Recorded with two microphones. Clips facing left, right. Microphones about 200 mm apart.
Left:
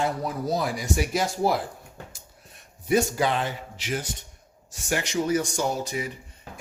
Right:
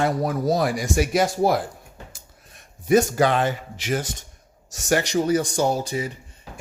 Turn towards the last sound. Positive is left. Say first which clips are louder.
# right 5 dB
turn(degrees=-30)  # may be behind; listen again after turning